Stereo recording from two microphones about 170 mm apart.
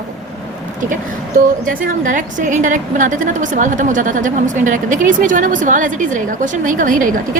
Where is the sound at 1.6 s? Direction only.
50° right (ahead or behind).